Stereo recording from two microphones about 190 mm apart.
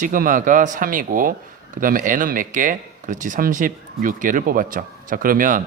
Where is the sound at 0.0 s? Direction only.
45° right (ahead or behind).